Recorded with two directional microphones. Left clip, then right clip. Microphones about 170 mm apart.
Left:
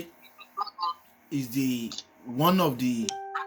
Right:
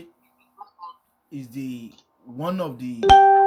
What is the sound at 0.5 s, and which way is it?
Music, 40° left (ahead or behind).